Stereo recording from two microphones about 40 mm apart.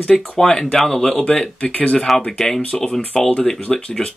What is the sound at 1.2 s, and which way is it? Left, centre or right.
Speech, left.